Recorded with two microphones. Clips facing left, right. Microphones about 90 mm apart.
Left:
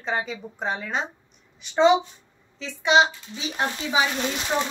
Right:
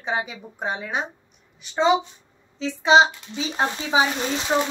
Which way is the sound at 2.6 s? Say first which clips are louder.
Right 3 dB; 25° right (ahead or behind).